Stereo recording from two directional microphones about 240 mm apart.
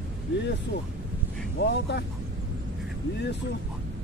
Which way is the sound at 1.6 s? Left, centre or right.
Left.